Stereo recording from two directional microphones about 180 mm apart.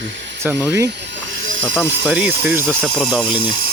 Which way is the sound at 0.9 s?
85° right.